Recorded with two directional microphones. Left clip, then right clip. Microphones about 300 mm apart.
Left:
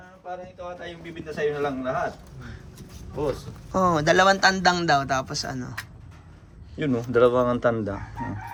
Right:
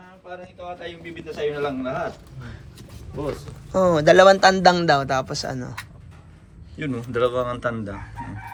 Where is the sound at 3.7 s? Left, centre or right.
Centre.